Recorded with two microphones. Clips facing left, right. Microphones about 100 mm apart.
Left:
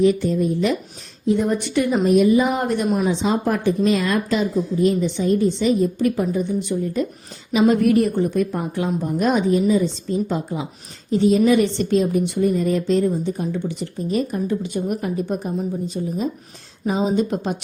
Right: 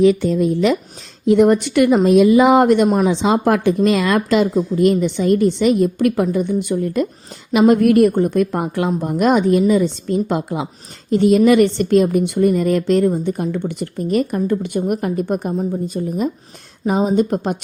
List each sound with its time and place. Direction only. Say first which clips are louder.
0.0 s speech: right 4 dB; 90° right
1.3 s a woman's voice: right 7 dB; 75° right (ahead or behind)
2.0 s a woman's voice: right 4 dB; 90° right
4.7 s a woman's voice: right 4 dB; 70° right (ahead or behind)
7.5 s a woman's voice: right 4 dB; 55° right (ahead or behind)